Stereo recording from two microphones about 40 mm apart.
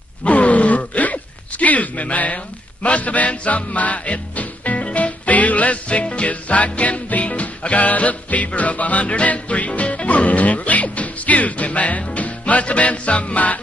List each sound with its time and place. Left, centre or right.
0.2 s speech: left